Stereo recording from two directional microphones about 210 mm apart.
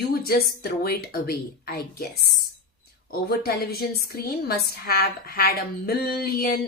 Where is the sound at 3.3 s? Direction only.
45° left (ahead or behind).